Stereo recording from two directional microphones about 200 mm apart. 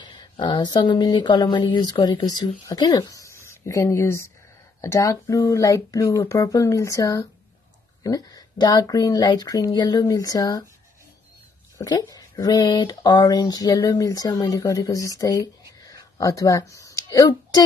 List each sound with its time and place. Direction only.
0.0 s a woman's voice: 20° left (ahead or behind)
11.8 s speech: 20° left (ahead or behind)